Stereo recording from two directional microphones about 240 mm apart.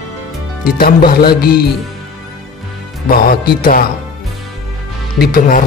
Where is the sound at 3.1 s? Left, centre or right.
Left.